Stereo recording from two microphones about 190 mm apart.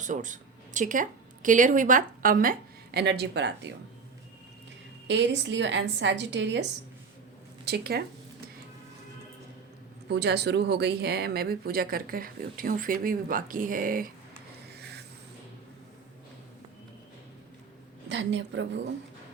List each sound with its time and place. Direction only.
0.0 s speech: 40° right (ahead or behind); by 3.7 s 65° right (ahead or behind)
5.0 s a woman's voice: 70° right (ahead or behind)
10.1 s speech: 60° right (ahead or behind)
14.8 s a sound: 60° right (ahead or behind)
18.1 s a woman's voice: 70° right (ahead or behind)